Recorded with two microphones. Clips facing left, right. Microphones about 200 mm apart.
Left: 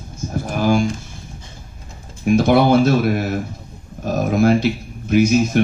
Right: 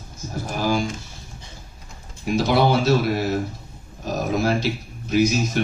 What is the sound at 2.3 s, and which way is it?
Speech, 50° left (ahead or behind).